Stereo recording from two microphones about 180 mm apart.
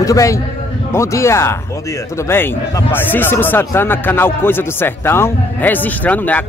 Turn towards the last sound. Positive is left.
turn(degrees=10)  # may be behind; listen again after turning